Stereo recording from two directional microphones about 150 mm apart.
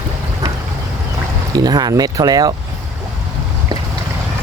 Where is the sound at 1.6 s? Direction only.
25° right (ahead or behind).